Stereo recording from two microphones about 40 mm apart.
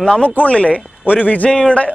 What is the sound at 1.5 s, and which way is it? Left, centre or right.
Speech, left.